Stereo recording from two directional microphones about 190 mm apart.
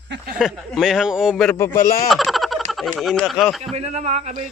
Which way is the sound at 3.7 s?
35° right (ahead or behind).